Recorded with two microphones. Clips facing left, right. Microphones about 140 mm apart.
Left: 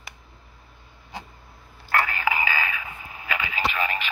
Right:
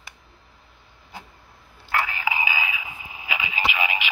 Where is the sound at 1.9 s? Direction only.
10° right (ahead or behind).